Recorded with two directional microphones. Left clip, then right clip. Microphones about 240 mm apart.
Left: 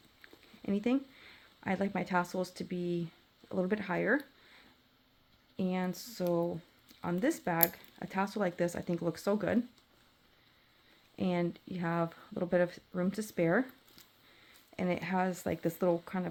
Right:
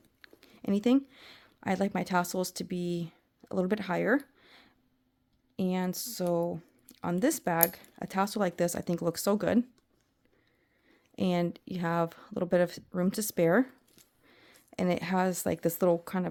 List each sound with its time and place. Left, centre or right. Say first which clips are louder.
0.2 s speech: right 3 dB; right
5.5 s speech: right 3 dB; right
11.2 s speech: right 4 dB; right
14.7 s speech: right 4 dB; right